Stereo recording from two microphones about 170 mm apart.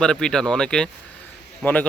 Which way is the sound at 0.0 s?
5° left (ahead or behind).